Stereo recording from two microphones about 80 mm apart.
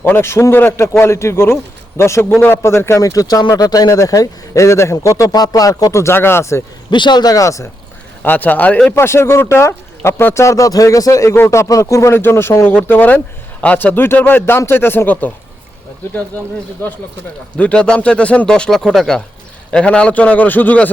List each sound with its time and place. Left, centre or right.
0.0 s speech: left
5.3 s speech: left
6.9 s speech: left
8.2 s speech: left
9.0 s speech: left
12.1 s speech: left
17.6 s speech: centre